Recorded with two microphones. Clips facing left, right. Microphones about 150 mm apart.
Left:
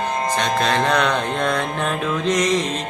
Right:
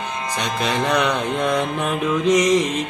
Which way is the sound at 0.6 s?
15° right (ahead or behind).